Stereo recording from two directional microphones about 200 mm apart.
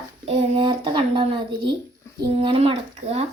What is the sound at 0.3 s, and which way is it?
Speech, 30° right (ahead or behind).